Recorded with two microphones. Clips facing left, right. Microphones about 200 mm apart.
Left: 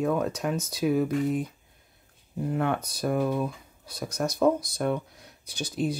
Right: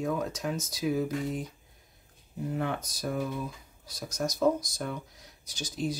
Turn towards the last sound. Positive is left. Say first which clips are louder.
# left 4 dB
turn(degrees=60)  # may be behind; listen again after turning